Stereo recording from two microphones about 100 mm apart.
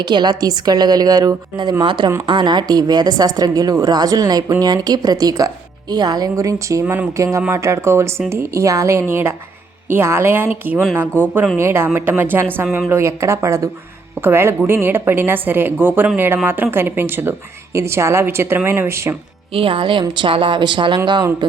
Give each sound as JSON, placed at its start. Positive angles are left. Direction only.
{"t": 0.0, "sound": "a woman's voice", "side_deg": -45}
{"t": 6.8, "sound": "a woman's voice", "side_deg": -20}
{"t": 19.5, "sound": "a woman's voice", "side_deg": -60}